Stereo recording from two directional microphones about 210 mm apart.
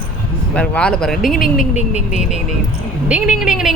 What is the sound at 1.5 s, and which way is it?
Speech, 35° left (ahead or behind).